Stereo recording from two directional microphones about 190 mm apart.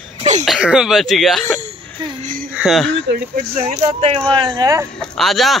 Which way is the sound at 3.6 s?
30° right (ahead or behind).